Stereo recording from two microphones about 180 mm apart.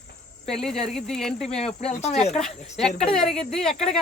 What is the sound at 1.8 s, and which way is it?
Speech, 40° left (ahead or behind).